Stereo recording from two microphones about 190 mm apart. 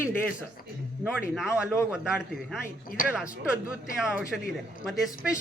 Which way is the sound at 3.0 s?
50° left (ahead or behind).